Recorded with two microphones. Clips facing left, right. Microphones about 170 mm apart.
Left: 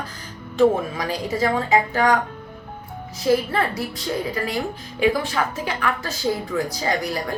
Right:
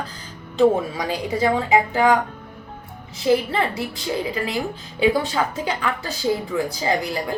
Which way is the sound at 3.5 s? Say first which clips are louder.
Even; 20° right (ahead or behind).